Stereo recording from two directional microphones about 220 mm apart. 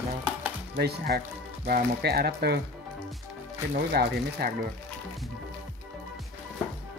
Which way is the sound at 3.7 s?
45° right (ahead or behind).